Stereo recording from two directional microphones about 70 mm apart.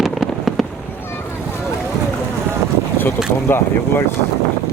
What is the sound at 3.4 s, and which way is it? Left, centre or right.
Speech, left.